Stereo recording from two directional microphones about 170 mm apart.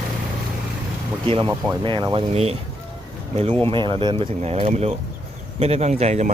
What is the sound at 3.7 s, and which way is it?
Speech, 30° right (ahead or behind).